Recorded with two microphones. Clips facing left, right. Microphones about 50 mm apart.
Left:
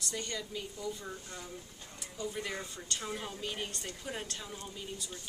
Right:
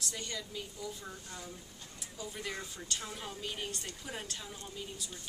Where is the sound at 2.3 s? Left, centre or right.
Centre.